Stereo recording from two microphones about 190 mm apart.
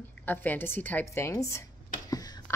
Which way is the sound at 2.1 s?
20° left (ahead or behind).